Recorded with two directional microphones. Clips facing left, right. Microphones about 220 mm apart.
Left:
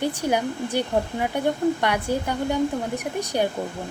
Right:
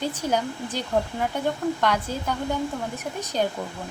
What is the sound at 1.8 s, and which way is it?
Speech, 10° left (ahead or behind).